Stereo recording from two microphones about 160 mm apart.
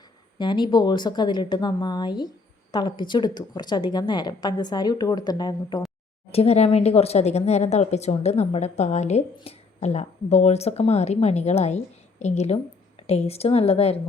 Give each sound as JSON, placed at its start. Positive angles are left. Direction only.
{"t": 0.3, "sound": "a woman's voice", "side_deg": 30}
{"t": 6.3, "sound": "a woman's voice", "side_deg": 40}